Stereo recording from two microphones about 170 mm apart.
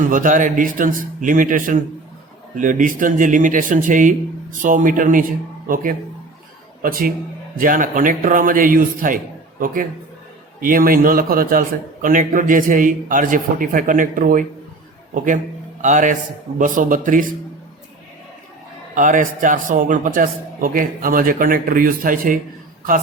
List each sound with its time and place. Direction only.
0.1 s a man's voice: 50° right (ahead or behind)
18.9 s a man's voice: 50° right (ahead or behind)